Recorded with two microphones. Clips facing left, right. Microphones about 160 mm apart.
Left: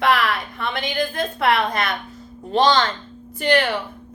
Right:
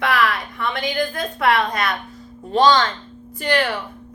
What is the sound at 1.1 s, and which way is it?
A woman's voice, 25° left (ahead or behind).